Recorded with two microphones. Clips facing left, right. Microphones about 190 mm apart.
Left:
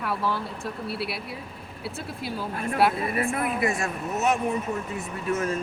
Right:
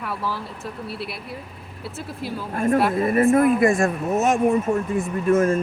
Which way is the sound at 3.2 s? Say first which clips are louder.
Right 10 dB; 50° right (ahead or behind).